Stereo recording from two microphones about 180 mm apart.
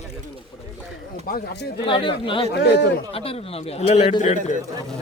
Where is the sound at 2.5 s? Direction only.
65° left (ahead or behind).